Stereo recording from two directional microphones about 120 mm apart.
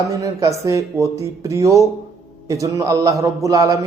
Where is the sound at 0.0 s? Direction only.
30° right (ahead or behind).